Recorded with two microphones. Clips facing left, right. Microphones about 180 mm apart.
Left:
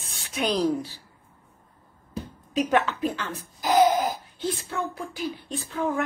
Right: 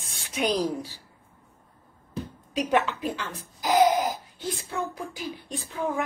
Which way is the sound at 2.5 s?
15° right (ahead or behind).